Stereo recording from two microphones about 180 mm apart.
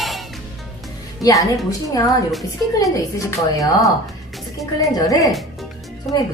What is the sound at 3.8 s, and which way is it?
Music, centre (ahead or behind).